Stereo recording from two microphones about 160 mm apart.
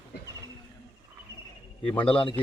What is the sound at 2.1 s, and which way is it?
Speech, 30° left (ahead or behind).